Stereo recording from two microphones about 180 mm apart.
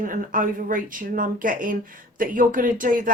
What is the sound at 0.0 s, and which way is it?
Speech, 50° right (ahead or behind).